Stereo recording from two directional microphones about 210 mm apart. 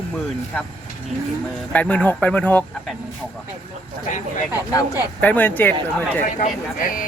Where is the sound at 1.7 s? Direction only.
5° left (ahead or behind).